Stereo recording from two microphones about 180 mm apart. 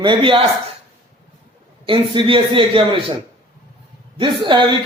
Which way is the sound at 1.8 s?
30° right (ahead or behind).